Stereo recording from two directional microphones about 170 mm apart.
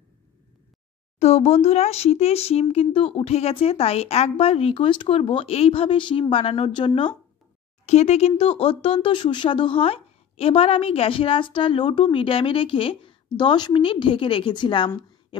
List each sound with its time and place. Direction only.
1.2 s a woman's voice: 40° left (ahead or behind)
7.8 s a woman's voice: 40° left (ahead or behind)